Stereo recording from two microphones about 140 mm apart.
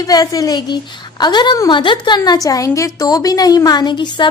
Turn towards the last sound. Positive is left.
turn(degrees=30)  # may be behind; listen again after turning